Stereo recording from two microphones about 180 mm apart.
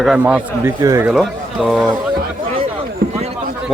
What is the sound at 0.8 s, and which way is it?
Speech, 20° right (ahead or behind).